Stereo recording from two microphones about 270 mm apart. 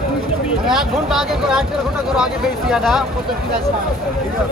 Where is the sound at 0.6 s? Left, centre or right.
Centre.